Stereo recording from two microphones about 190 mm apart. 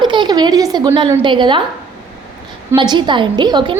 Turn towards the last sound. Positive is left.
turn(degrees=-25)  # may be behind; listen again after turning